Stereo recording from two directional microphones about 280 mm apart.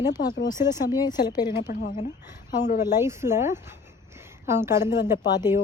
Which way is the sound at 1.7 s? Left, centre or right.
Left.